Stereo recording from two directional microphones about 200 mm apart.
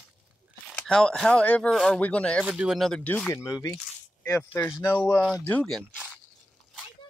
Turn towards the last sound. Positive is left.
turn(degrees=5)  # may be behind; listen again after turning